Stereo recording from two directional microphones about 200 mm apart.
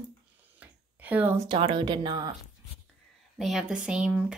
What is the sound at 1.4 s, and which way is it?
Speech, 25° right (ahead or behind).